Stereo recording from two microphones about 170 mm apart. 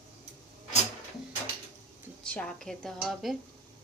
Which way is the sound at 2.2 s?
5° left (ahead or behind).